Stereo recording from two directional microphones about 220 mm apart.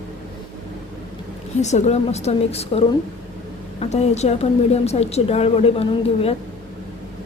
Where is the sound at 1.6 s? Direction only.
30° left (ahead or behind).